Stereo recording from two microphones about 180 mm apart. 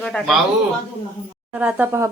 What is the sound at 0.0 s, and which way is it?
Speech, 5° left (ahead or behind).